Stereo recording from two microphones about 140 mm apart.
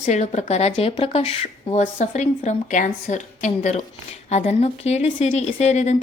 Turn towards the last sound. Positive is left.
turn(degrees=55)  # may be behind; listen again after turning